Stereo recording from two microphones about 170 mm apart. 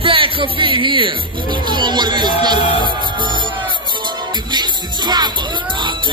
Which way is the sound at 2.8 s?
25° right (ahead or behind).